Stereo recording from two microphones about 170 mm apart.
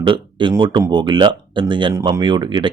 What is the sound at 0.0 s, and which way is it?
Speech, 30° right (ahead or behind).